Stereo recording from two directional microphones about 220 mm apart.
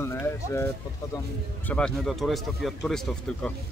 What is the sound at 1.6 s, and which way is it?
Speech, 5° left (ahead or behind).